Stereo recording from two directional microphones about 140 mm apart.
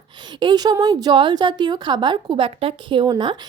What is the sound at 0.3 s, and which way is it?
A woman's voice, 30° right (ahead or behind).